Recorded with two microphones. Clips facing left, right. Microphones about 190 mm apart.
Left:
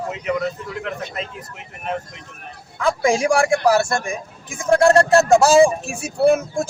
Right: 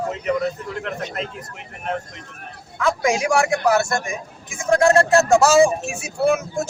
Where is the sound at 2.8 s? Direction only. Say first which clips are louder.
Left 2 dB; 30° left (ahead or behind).